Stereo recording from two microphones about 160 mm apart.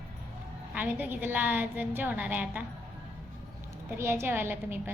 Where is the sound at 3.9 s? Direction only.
15° right (ahead or behind).